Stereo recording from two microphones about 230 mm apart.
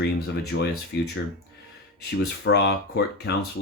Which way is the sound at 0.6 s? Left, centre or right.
Left.